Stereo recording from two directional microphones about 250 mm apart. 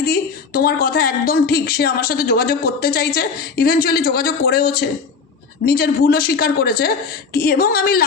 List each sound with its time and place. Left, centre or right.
0.0 s speech: left